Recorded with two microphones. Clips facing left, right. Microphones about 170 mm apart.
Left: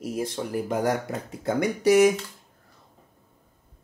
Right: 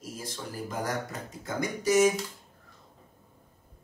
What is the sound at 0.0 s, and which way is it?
Speech, 65° left (ahead or behind).